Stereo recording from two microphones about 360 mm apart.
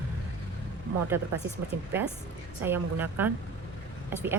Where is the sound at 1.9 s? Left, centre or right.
Centre.